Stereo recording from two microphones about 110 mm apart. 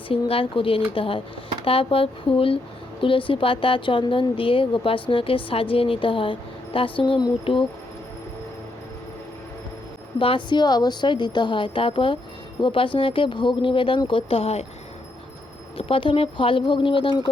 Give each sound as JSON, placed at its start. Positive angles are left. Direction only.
{"t": 0.1, "sound": "a woman's voice", "side_deg": 55}
{"t": 10.2, "sound": "a woman's voice", "side_deg": 55}
{"t": 15.8, "sound": "a woman's voice", "side_deg": 55}